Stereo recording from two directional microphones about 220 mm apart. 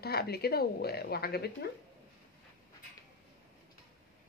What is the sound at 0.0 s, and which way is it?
A woman's voice, 45° left (ahead or behind).